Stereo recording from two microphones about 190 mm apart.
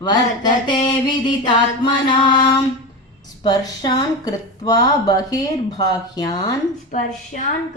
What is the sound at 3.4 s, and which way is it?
Speech, 25° left (ahead or behind).